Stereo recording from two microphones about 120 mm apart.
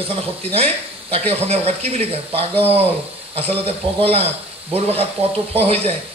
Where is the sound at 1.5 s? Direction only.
60° right (ahead or behind).